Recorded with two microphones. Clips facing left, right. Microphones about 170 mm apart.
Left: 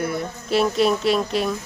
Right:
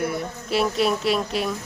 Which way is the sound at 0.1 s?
5° right (ahead or behind).